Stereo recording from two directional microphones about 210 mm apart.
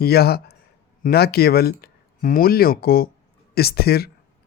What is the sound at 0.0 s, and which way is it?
Speech, 50° left (ahead or behind).